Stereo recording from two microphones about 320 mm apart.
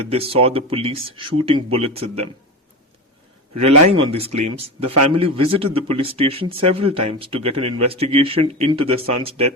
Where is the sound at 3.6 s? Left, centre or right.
Centre.